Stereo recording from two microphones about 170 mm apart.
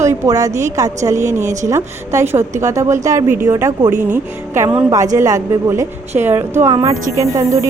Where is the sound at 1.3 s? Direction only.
45° right (ahead or behind).